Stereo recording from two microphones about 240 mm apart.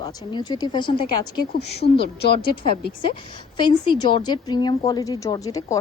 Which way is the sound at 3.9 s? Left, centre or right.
Centre.